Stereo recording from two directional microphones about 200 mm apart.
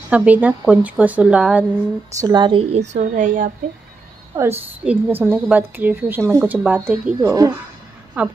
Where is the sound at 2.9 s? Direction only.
40° right (ahead or behind).